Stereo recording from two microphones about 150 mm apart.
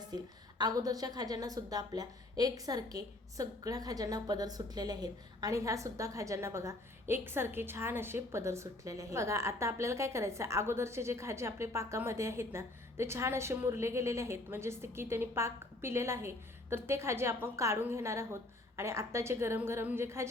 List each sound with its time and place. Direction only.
0.6 s a woman's voice: 25° right (ahead or behind)